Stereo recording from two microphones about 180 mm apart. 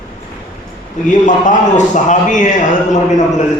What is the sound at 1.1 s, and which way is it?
A man's voice, 45° left (ahead or behind).